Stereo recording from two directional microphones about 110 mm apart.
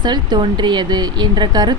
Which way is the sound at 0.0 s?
40° right (ahead or behind).